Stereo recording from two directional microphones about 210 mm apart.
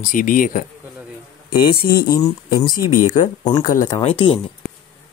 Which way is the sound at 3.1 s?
35° left (ahead or behind).